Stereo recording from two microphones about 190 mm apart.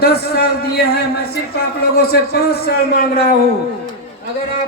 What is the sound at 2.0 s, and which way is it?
Speech, 55° left (ahead or behind).